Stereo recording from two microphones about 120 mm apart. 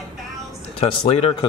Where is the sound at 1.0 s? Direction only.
40° left (ahead or behind).